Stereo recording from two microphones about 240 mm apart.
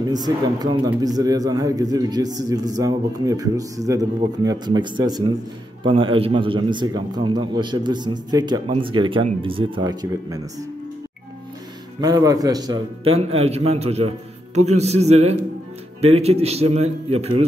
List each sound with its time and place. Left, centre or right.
0.0 s a man's voice: centre
12.0 s a man's voice: centre